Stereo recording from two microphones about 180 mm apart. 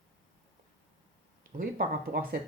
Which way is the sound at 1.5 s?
50° right (ahead or behind).